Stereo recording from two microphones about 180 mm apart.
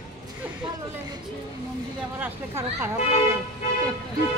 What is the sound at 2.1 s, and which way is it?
Speech, 10° right (ahead or behind).